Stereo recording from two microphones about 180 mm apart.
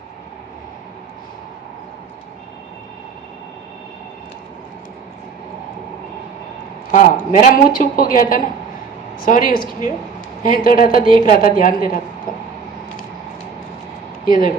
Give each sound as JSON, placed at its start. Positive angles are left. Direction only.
{"t": 6.9, "sound": "a woman's voice", "side_deg": 45}
{"t": 14.3, "sound": "a woman's voice", "side_deg": 50}